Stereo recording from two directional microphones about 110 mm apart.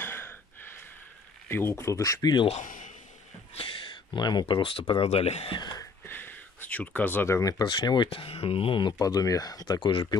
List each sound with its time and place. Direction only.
0.0 s a sound: 20° left (ahead or behind)
1.5 s speech: 20° left (ahead or behind)
3.5 s speech: 55° left (ahead or behind)
5.6 s speech: 40° left (ahead or behind)
6.0 s speech: 20° left (ahead or behind); by 8.9 s 50° left (ahead or behind)
8.9 s speech: 30° left (ahead or behind)